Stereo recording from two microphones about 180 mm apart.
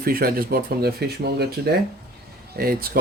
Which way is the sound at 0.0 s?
55° right (ahead or behind).